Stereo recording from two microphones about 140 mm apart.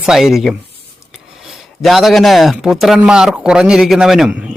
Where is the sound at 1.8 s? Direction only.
Centre (ahead or behind).